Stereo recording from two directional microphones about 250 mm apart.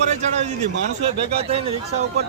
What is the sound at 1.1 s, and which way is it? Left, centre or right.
Speech, right.